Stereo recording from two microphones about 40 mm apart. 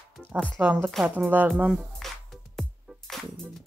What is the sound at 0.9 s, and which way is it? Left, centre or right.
Speech, centre.